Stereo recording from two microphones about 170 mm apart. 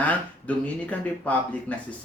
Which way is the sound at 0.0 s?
10° left (ahead or behind).